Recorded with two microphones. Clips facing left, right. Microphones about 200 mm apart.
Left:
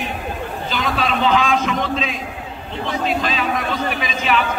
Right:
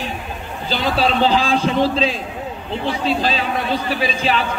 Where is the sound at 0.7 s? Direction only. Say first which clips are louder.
Right 4 dB; 35° right (ahead or behind).